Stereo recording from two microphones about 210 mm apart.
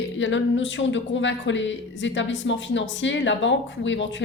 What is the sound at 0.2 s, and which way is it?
Speech, 65° left (ahead or behind).